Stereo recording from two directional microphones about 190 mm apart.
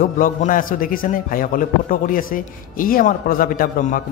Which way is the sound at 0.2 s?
45° left (ahead or behind).